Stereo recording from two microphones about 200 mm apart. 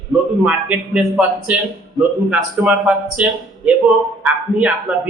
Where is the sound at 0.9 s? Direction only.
5° right (ahead or behind).